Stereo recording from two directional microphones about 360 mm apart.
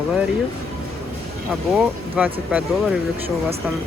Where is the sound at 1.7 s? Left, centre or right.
Centre.